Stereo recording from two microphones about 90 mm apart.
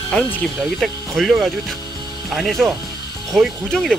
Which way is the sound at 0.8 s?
Centre (ahead or behind).